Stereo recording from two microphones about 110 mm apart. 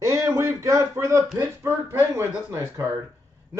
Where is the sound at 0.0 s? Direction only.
25° right (ahead or behind).